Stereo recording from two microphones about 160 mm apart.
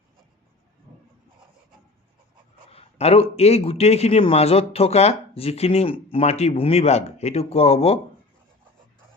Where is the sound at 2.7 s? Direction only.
40° left (ahead or behind).